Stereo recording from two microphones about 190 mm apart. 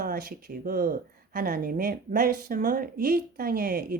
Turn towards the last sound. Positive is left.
turn(degrees=-50)  # may be behind; listen again after turning